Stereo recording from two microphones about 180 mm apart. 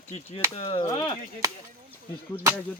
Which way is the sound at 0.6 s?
20° left (ahead or behind).